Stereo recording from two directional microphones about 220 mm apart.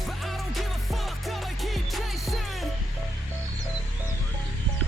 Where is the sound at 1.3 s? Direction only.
Centre (ahead or behind).